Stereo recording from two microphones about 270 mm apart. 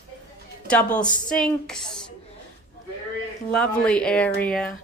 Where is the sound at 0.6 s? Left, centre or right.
Centre.